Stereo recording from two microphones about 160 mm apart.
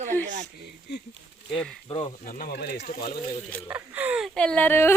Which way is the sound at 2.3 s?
70° left (ahead or behind).